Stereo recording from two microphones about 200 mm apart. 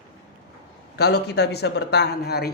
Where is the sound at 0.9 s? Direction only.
55° left (ahead or behind).